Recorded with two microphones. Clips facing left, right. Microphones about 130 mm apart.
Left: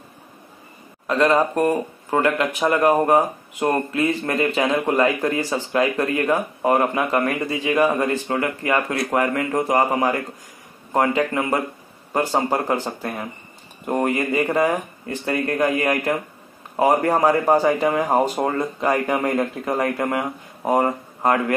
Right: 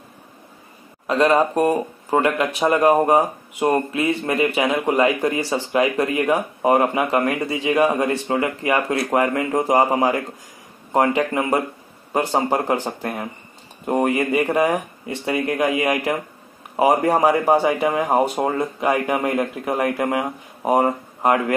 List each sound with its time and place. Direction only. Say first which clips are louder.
1.0 s speech: right 1 dB; 15° right (ahead or behind)